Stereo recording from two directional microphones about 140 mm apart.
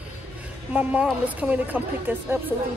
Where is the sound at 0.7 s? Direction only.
10° right (ahead or behind).